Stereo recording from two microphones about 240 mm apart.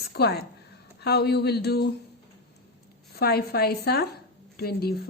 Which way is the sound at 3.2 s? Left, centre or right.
Left.